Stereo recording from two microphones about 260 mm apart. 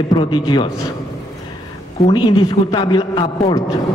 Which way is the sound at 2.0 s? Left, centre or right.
Centre.